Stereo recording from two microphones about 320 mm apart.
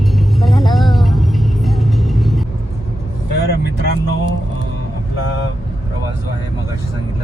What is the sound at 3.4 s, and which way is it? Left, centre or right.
Vehicle, left.